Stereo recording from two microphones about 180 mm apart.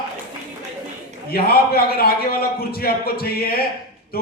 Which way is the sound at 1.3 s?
55° left (ahead or behind).